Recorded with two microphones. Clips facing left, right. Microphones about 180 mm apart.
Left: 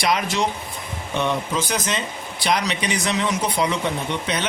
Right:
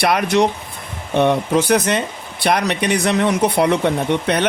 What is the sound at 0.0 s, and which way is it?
Speech, 60° right (ahead or behind).